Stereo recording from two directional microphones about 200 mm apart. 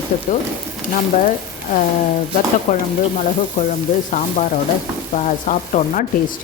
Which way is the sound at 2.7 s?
35° left (ahead or behind).